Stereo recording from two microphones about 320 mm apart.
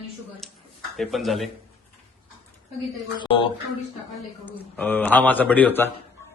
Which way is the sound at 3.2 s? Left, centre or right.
Centre.